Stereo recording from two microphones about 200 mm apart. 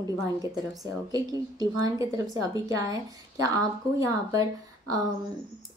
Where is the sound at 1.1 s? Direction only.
20° right (ahead or behind).